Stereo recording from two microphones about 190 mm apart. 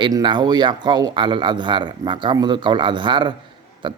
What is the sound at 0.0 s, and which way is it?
A man's voice, 25° right (ahead or behind).